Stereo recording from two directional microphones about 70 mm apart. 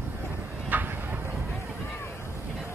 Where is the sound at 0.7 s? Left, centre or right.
Right.